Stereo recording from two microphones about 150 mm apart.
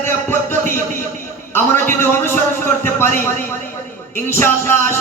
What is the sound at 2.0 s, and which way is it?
Speech, 15° left (ahead or behind).